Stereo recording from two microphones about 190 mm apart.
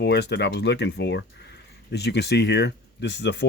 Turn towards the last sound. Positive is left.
turn(degrees=65)  # may be behind; listen again after turning